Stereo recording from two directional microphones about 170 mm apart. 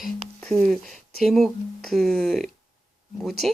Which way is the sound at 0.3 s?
5° left (ahead or behind).